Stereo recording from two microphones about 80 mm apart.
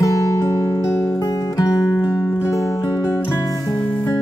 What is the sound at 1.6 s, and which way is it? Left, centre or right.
Music, left.